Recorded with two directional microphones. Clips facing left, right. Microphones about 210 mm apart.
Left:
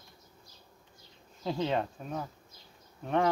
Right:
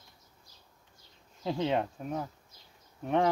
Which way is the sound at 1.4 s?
15° right (ahead or behind).